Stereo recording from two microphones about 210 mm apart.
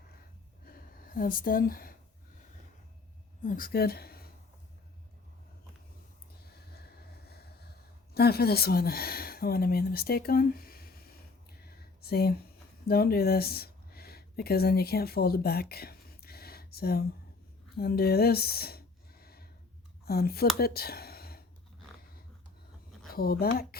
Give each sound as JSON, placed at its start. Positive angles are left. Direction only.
{"t": 0.7, "sound": "speech", "side_deg": 40}
{"t": 3.4, "sound": "speech", "side_deg": 40}
{"t": 6.5, "sound": "a sound", "side_deg": 50}
{"t": 8.1, "sound": "speech", "side_deg": 50}
{"t": 11.6, "sound": "a sound", "side_deg": 50}
{"t": 12.9, "sound": "speech", "side_deg": 45}
{"t": 17.7, "sound": "a sound", "side_deg": 45}
{"t": 20.1, "sound": "speech", "side_deg": 45}
{"t": 23.1, "sound": "speech", "side_deg": 45}